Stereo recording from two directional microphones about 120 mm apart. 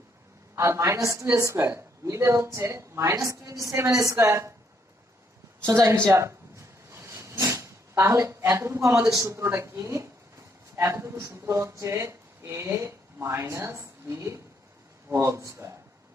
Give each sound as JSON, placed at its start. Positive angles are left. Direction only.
{"t": 0.5, "sound": "speech", "side_deg": -25}
{"t": 5.6, "sound": "a sound", "side_deg": -25}
{"t": 9.1, "sound": "speech", "side_deg": -25}